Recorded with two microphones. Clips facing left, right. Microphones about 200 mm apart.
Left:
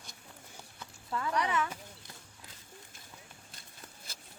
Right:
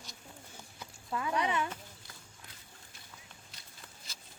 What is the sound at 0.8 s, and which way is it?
Speech, 15° right (ahead or behind).